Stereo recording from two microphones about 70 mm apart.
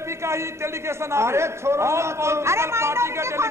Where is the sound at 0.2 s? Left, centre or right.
Right.